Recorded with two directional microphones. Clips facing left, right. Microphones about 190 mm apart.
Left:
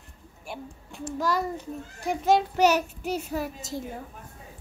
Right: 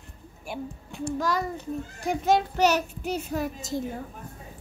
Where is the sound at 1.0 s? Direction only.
10° left (ahead or behind).